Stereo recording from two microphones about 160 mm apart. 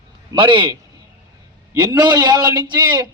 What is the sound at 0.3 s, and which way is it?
Speech, 30° right (ahead or behind).